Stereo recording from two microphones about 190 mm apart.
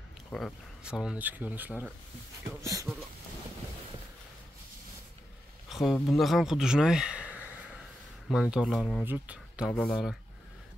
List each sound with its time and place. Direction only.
0.3 s speech: centre (ahead or behind); by 3.0 s 15° right (ahead or behind)
5.7 s speech: centre (ahead or behind)
9.7 s speech: 5° left (ahead or behind)